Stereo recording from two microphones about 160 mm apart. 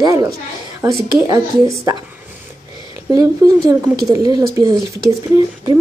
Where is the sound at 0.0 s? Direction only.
20° right (ahead or behind).